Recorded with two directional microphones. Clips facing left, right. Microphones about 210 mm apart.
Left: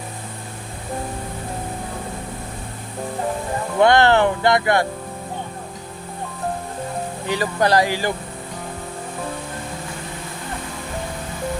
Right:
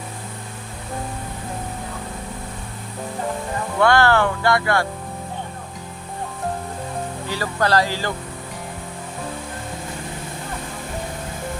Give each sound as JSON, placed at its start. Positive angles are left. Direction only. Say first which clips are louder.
{"t": 3.8, "sound": "speech", "louder": "left 2 dB", "side_deg": 20}
{"t": 7.3, "sound": "speech", "louder": "left 3 dB", "side_deg": 20}